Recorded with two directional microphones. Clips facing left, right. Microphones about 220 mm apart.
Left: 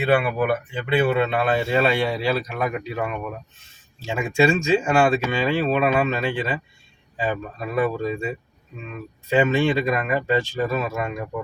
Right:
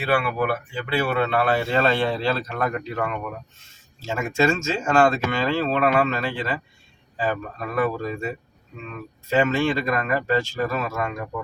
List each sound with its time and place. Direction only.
0.7 s speech: 20° left (ahead or behind)